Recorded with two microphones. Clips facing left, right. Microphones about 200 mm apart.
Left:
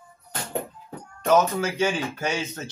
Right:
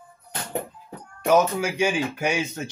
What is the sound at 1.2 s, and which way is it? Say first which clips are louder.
Speech: right 1 dB; 10° right (ahead or behind).